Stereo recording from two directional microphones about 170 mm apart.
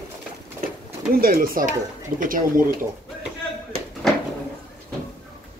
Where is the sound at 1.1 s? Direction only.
60° right (ahead or behind).